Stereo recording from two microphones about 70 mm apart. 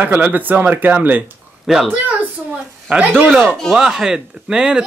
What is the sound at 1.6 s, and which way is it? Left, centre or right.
Speech, centre.